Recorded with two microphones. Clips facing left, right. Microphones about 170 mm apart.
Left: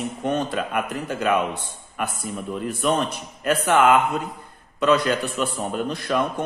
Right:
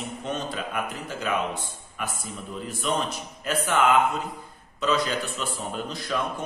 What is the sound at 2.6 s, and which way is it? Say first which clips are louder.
A man's voice: left 5 dB; 60° left (ahead or behind).